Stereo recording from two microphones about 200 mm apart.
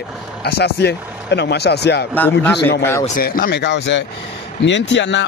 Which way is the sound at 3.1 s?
50° left (ahead or behind).